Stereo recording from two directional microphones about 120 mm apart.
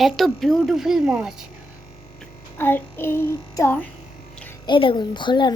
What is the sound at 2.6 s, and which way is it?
Child singing, 15° left (ahead or behind).